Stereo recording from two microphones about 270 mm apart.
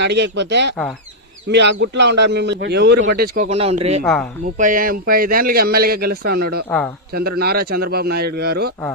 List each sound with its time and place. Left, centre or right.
0.0 s a man's voice: right
4.0 s speech: centre
4.4 s a man's voice: right
6.7 s speech: centre
7.1 s a man's voice: right